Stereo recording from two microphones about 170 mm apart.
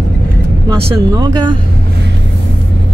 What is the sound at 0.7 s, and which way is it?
Speech, 25° right (ahead or behind).